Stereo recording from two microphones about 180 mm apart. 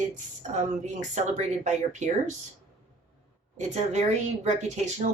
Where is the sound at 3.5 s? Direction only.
40° right (ahead or behind).